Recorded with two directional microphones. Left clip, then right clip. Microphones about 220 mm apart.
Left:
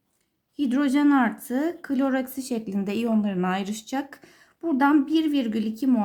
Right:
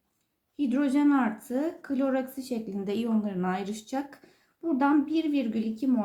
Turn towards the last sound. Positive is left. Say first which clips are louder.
# left 4 dB
turn(degrees=45)  # may be behind; listen again after turning